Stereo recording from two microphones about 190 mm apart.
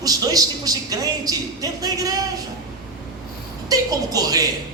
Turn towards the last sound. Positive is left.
turn(degrees=-20)  # may be behind; listen again after turning